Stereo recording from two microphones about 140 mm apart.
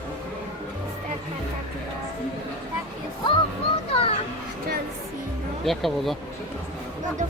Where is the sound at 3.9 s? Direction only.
40° left (ahead or behind).